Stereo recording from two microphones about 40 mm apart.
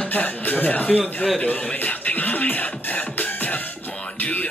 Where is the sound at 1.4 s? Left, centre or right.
Left.